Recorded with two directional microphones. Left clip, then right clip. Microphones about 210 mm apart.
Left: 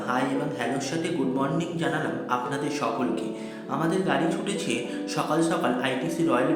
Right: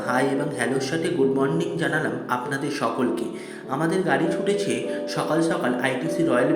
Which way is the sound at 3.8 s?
10° right (ahead or behind).